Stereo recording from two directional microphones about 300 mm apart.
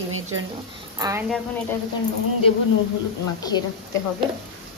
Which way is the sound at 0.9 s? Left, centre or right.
Centre.